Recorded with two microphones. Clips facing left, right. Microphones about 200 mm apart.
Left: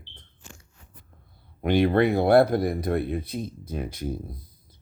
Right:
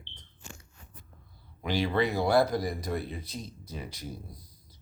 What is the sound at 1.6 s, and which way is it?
Speech, 60° left (ahead or behind).